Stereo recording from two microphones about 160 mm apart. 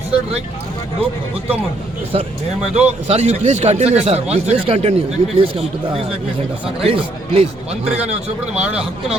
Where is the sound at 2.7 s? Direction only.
10° right (ahead or behind).